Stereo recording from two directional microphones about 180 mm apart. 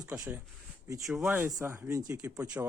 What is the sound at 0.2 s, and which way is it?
Speech, 10° right (ahead or behind).